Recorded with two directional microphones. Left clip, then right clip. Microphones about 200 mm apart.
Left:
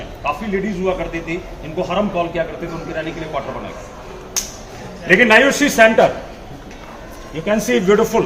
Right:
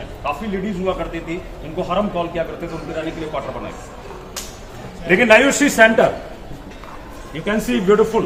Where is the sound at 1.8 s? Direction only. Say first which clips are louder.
Left 1 dB; 10° left (ahead or behind).